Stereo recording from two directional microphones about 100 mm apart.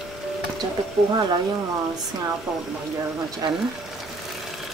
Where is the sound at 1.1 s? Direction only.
45° right (ahead or behind).